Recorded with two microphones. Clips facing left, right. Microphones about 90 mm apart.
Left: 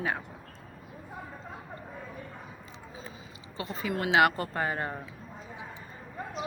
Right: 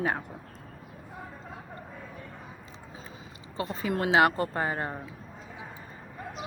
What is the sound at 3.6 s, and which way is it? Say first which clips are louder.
A woman's voice: right 3 dB; 40° right (ahead or behind).